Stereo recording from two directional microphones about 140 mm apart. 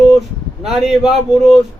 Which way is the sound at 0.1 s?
Centre (ahead or behind).